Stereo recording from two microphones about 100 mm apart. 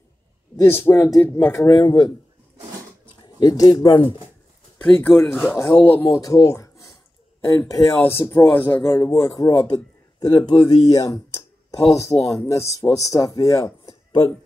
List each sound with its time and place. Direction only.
0.7 s speech: 20° left (ahead or behind)
1.7 s speech: 45° left (ahead or behind)
3.3 s speech: 40° left (ahead or behind); by 4.2 s 55° left (ahead or behind)
4.7 s speech: 15° left (ahead or behind)
5.2 s speech: 5° left (ahead or behind)
5.7 s speech: 20° left (ahead or behind)
6.0 s speech: 35° left (ahead or behind)
8.8 s speech: 35° left (ahead or behind)
10.2 s speech: 50° left (ahead or behind); by 13.9 s 35° left (ahead or behind)